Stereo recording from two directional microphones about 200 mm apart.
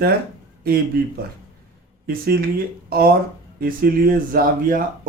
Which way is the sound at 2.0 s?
50° right (ahead or behind).